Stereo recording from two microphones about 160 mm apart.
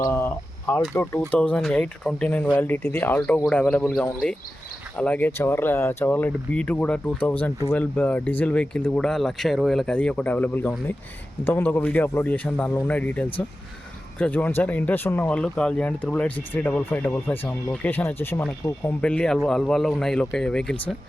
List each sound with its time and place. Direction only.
0.0 s speech: 15° left (ahead or behind)